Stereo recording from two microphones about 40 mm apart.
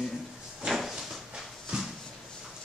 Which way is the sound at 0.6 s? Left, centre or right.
Right.